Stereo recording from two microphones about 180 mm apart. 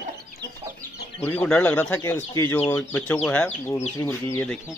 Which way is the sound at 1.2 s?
10° left (ahead or behind).